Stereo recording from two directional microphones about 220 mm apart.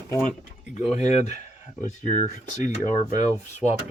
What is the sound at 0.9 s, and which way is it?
Speech, 30° left (ahead or behind).